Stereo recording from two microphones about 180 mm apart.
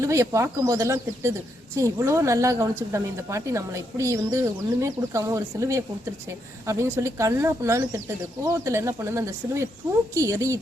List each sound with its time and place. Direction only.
0.0 s a woman's voice: 15° right (ahead or behind)